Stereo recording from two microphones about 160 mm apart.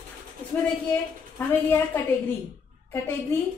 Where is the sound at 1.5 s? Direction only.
15° left (ahead or behind).